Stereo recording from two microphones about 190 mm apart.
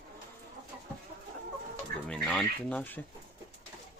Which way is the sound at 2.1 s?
5° left (ahead or behind).